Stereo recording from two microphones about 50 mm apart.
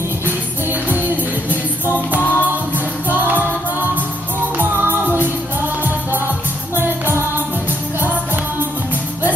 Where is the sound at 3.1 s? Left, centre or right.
Right.